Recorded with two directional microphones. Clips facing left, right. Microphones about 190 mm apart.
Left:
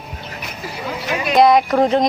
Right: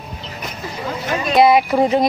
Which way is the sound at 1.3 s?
5° right (ahead or behind).